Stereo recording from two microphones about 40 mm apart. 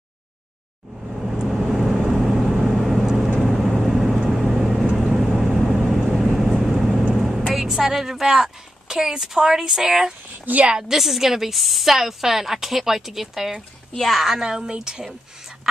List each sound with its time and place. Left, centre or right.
1.5 s vehicle: centre
7.5 s a woman's voice: centre
10.4 s a woman's voice: right
10.7 s a woman's voice: centre
13.9 s speech: centre
14.2 s a woman's voice: centre
15.7 s a sound: centre